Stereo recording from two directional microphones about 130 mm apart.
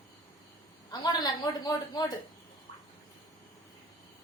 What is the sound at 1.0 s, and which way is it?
Speech, 30° left (ahead or behind).